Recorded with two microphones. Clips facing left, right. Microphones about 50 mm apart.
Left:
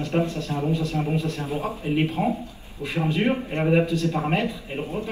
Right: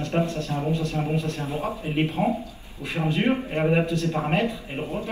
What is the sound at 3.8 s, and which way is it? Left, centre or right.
Speech, right.